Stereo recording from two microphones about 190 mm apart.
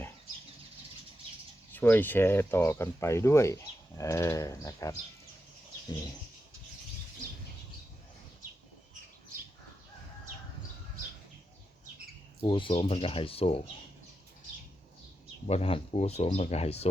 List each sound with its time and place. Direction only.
1.7 s speech: 10° left (ahead or behind)
12.4 s speech: 25° left (ahead or behind)
15.4 s speech: 30° left (ahead or behind)